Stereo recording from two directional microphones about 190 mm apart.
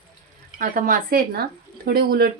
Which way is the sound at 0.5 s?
45° right (ahead or behind).